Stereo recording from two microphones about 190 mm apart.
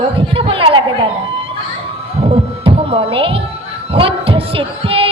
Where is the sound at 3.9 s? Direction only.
30° right (ahead or behind).